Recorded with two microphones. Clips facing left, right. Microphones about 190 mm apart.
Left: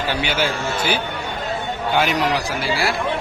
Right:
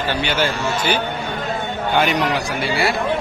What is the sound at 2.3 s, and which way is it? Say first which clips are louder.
Speech: right 1 dB; centre (ahead or behind).